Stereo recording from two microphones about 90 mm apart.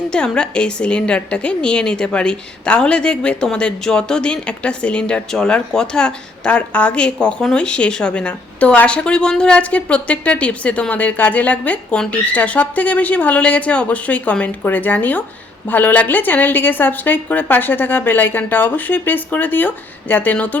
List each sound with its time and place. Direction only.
0.1 s a woman's voice: 10° left (ahead or behind)